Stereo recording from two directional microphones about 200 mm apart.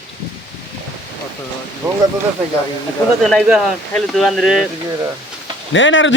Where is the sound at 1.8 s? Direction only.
10° right (ahead or behind).